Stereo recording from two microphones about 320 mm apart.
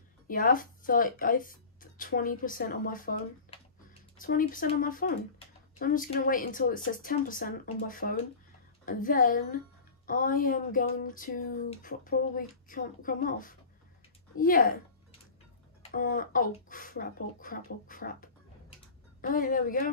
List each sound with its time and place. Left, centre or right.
0.3 s speech: left
15.9 s speech: left